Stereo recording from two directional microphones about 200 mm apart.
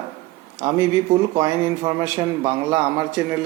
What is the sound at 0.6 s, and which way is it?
A man's voice, 15° right (ahead or behind).